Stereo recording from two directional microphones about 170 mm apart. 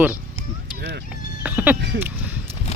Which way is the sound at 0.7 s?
75° right (ahead or behind).